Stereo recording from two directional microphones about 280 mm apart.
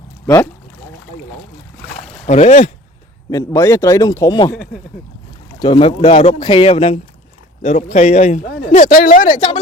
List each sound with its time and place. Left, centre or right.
2.2 s speech: left
3.2 s a man's voice: centre
4.5 s speech: centre
5.5 s speech: centre